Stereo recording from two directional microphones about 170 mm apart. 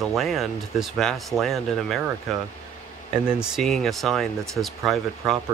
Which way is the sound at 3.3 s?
5° right (ahead or behind).